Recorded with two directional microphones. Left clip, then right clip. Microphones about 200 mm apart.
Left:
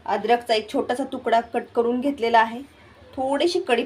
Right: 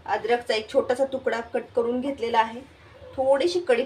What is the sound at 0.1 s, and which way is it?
Speech, 35° left (ahead or behind).